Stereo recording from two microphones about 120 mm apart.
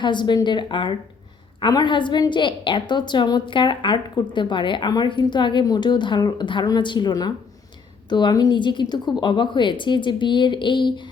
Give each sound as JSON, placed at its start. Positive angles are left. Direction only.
{"t": 0.0, "sound": "a woman's voice", "side_deg": 40}